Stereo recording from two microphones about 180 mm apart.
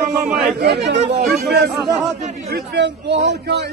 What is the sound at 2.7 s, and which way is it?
Speech, 75° right (ahead or behind).